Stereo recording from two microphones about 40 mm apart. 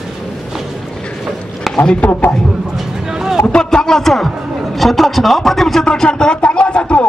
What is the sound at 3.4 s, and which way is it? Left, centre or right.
A man's voice, centre.